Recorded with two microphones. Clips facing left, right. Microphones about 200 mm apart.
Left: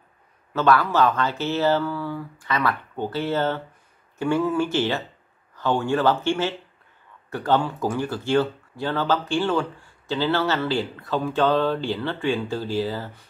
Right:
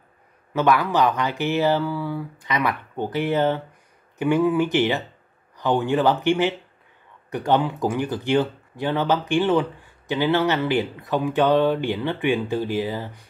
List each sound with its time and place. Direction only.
0.5 s speech: 15° right (ahead or behind)